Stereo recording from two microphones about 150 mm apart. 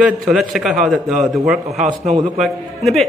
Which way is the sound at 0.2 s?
Centre (ahead or behind).